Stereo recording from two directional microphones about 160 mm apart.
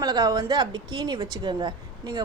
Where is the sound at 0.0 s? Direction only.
25° right (ahead or behind).